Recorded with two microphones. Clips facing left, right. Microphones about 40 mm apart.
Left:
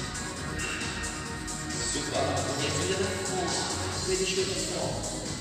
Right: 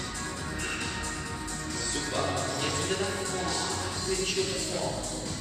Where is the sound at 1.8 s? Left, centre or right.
Centre.